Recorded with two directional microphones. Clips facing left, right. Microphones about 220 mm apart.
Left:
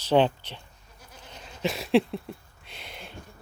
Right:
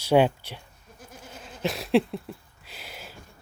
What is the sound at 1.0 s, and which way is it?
Goat, 50° right (ahead or behind).